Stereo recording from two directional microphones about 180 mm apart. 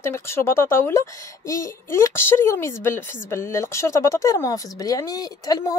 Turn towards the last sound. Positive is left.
turn(degrees=20)  # may be behind; listen again after turning